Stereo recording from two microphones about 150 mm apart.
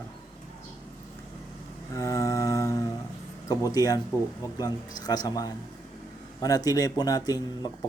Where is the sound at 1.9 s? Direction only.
20° left (ahead or behind).